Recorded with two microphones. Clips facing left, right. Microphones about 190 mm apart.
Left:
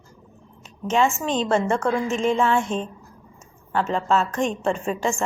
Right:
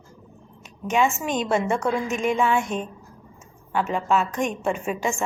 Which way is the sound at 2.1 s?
25° left (ahead or behind).